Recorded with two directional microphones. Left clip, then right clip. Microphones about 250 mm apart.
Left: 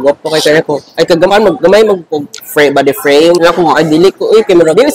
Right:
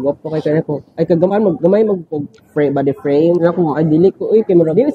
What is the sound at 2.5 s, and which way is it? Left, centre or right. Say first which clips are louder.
Speech: left 8 dB; centre.